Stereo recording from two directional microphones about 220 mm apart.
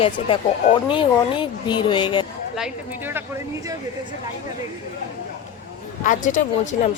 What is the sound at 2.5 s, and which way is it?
Speech, 5° right (ahead or behind).